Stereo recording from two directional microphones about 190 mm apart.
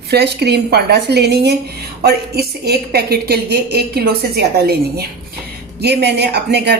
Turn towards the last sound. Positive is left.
turn(degrees=-60)  # may be behind; listen again after turning